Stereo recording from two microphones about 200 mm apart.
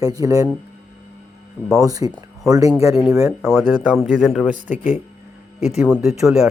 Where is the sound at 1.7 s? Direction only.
15° right (ahead or behind).